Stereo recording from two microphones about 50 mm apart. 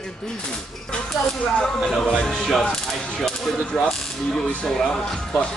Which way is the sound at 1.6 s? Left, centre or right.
Centre.